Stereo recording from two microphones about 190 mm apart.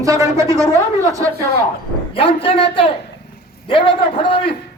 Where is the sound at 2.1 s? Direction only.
30° left (ahead or behind).